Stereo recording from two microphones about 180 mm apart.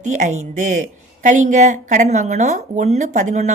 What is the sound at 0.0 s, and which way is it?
Speech, 45° right (ahead or behind).